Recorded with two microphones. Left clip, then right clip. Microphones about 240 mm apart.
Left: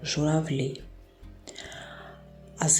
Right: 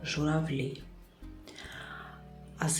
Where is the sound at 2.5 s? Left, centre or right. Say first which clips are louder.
Left 8 dB; centre.